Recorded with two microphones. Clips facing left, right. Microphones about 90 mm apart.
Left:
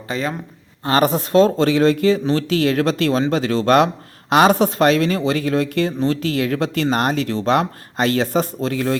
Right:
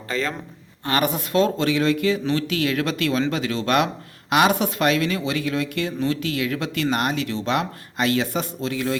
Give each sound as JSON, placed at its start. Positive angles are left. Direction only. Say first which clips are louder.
{"t": 0.1, "sound": "a man's voice", "louder": "left 2 dB", "side_deg": 20}
{"t": 0.9, "sound": "speech", "louder": "left 6 dB", "side_deg": 30}